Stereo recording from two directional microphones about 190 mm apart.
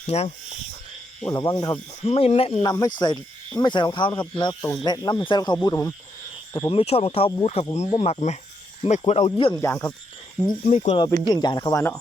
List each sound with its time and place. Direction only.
0.1 s speech: 35° left (ahead or behind)
1.2 s speech: 15° left (ahead or behind)
2.7 s speech: 20° left (ahead or behind)
6.7 s speech: 30° left (ahead or behind)
9.6 s speech: 15° left (ahead or behind)
10.7 s speech: 30° left (ahead or behind)